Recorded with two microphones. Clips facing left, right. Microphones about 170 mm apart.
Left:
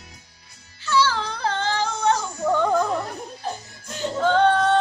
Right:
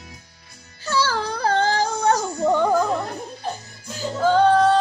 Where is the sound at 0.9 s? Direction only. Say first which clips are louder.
Left 1 dB; 40° right (ahead or behind).